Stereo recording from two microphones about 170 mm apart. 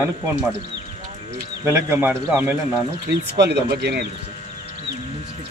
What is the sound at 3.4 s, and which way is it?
Speech, 75° right (ahead or behind).